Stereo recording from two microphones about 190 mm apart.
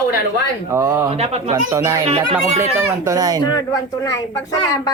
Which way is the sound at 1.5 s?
15° right (ahead or behind).